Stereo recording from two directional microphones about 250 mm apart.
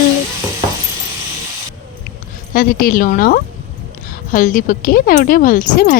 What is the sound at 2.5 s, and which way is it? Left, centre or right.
A woman's voice, left.